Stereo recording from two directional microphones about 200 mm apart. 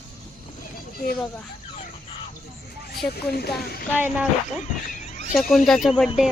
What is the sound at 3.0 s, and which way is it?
Speech, 50° left (ahead or behind).